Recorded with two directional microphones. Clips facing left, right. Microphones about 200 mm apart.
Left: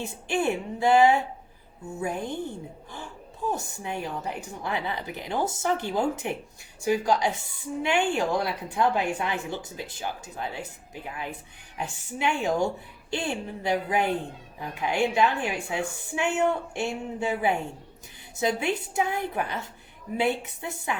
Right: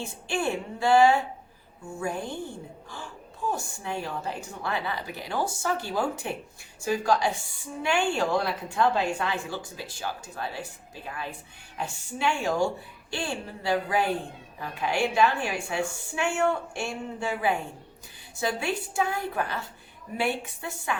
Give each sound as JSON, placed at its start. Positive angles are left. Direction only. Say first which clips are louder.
{"t": 0.0, "sound": "a woman's voice", "louder": "left 2 dB", "side_deg": 20}